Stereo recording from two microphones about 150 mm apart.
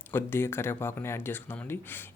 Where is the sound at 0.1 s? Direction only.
15° left (ahead or behind).